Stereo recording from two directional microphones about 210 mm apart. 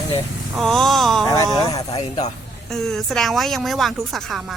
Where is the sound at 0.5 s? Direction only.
Centre (ahead or behind).